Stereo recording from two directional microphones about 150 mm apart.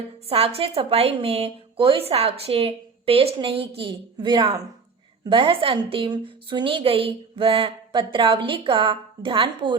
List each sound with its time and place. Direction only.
0.3 s a woman's voice: 40° right (ahead or behind)